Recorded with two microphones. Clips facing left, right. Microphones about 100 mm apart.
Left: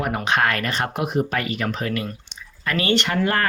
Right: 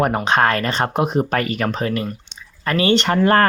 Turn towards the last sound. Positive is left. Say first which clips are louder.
# right 6 dB
turn(degrees=-45)  # may be behind; listen again after turning